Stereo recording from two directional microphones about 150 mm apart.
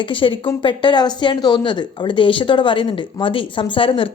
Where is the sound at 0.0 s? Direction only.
35° left (ahead or behind).